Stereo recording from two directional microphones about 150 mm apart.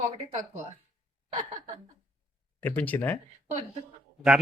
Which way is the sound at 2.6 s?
10° left (ahead or behind).